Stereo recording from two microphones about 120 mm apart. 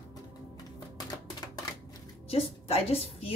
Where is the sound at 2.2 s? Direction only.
55° left (ahead or behind).